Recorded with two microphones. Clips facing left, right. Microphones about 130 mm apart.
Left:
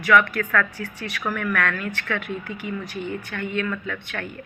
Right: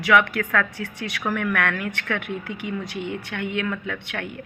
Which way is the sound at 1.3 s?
65° right (ahead or behind).